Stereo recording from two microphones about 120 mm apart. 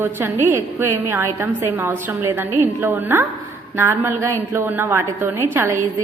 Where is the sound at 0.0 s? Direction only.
20° right (ahead or behind).